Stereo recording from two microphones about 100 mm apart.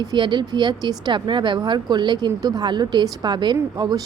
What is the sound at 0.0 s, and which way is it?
Speech, 45° right (ahead or behind).